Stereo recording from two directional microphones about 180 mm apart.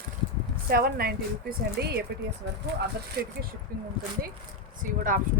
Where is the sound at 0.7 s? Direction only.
55° right (ahead or behind).